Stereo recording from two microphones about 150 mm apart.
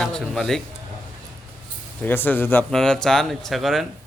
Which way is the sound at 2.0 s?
10° left (ahead or behind).